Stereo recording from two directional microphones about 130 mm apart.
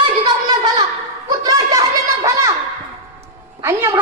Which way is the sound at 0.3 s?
35° right (ahead or behind).